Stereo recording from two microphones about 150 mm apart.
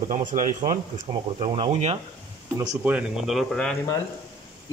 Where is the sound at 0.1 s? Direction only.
60° right (ahead or behind).